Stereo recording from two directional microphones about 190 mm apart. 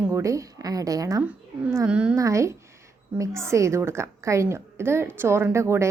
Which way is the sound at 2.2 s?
15° right (ahead or behind).